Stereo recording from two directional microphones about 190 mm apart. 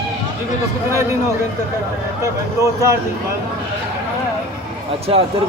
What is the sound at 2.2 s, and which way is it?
Speech, 15° right (ahead or behind).